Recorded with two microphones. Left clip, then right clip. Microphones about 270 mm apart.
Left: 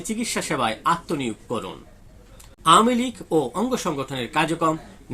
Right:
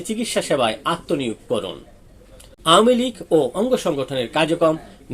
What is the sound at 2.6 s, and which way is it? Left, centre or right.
Speech, centre.